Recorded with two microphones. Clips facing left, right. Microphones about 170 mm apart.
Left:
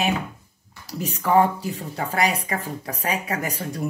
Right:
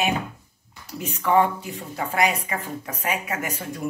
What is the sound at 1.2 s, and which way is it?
Speech, 35° left (ahead or behind).